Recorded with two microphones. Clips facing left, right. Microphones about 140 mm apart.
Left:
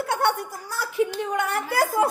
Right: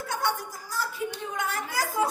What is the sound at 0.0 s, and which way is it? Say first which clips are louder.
Speech: left 6 dB; 65° left (ahead or behind).